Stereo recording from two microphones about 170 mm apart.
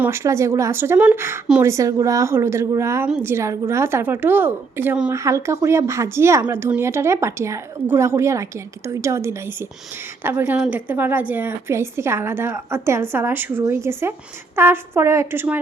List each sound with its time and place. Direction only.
0.0 s a woman's voice: 15° right (ahead or behind)